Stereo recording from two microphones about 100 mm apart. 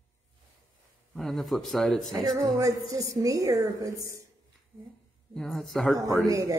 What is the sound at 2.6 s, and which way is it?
A woman's voice, 35° right (ahead or behind).